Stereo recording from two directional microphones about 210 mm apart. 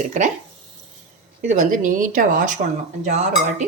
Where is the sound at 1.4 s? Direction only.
35° right (ahead or behind).